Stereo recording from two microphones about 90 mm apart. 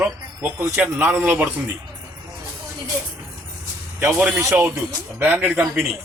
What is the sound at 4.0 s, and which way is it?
Speech, 25° right (ahead or behind).